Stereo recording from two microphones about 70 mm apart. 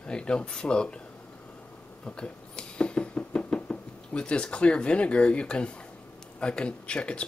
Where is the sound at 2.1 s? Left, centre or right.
Centre.